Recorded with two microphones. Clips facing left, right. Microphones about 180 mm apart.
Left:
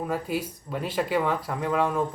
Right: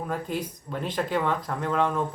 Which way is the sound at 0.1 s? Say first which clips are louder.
Left 2 dB; 5° left (ahead or behind).